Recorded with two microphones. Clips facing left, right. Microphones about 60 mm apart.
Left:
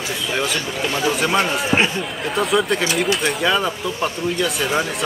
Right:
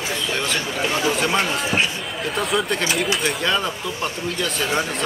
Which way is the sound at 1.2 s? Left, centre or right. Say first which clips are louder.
Left 2 dB; centre.